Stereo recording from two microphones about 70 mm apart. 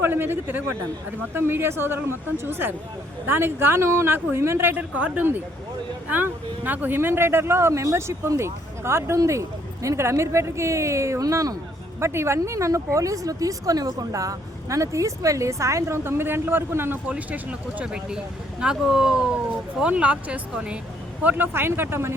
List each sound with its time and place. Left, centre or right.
0.0 s speech: right
4.8 s speech: centre; by 11.5 s right
11.9 s speech: right
17.1 s speech: right